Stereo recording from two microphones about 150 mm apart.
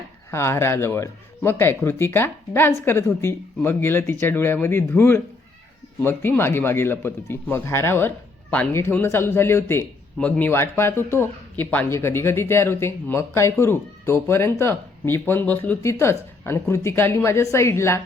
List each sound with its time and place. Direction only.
0.3 s speech: 15° left (ahead or behind)